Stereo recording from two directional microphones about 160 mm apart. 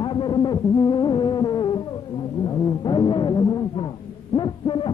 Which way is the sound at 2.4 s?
25° left (ahead or behind).